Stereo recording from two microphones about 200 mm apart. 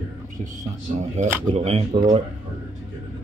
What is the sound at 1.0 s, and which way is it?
A man's voice, 35° right (ahead or behind).